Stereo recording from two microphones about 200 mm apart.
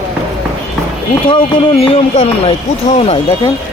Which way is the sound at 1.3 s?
25° left (ahead or behind).